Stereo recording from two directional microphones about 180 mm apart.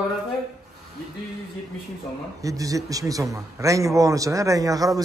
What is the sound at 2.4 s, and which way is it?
A man's voice, 20° right (ahead or behind).